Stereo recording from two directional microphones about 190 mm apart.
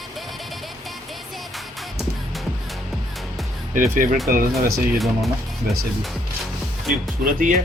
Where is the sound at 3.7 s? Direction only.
45° right (ahead or behind).